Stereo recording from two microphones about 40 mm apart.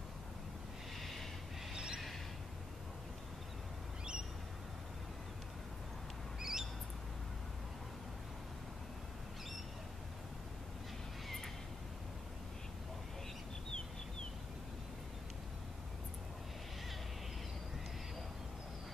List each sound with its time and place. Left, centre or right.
1.7 s a sound: centre
6.4 s squawk: centre
11.2 s neigh: centre